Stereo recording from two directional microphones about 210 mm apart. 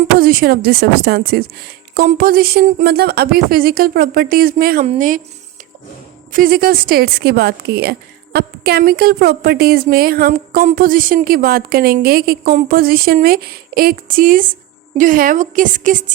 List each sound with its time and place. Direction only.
0.2 s a woman's voice: 45° right (ahead or behind)
6.3 s a woman's voice: 45° right (ahead or behind)